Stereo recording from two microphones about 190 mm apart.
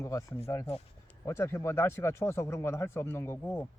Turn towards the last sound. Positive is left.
turn(degrees=15)  # may be behind; listen again after turning